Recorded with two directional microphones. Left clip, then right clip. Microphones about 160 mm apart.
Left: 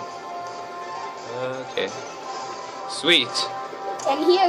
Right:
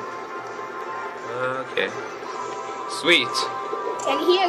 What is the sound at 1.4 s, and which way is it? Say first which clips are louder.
Speech: right 3 dB; 10° left (ahead or behind).